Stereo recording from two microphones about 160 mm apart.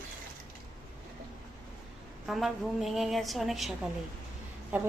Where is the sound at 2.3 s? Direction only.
Centre (ahead or behind).